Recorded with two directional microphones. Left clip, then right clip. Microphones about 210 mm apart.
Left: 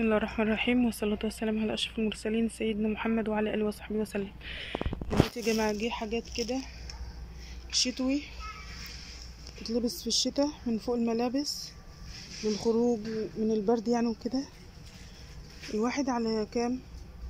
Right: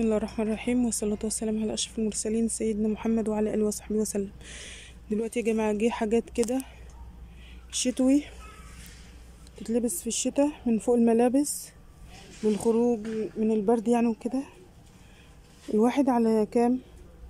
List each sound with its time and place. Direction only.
0.0 s speech: 20° right (ahead or behind)
9.8 s speech: 30° right (ahead or behind)
10.3 s speech: 15° right (ahead or behind)
11.3 s speech: 25° right (ahead or behind)
15.7 s speech: 20° right (ahead or behind)